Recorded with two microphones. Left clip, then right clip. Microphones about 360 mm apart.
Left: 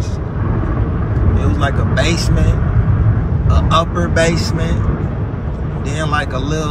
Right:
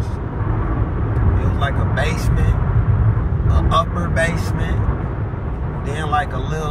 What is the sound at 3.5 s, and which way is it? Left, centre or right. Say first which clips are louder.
Speech: left 3 dB; centre.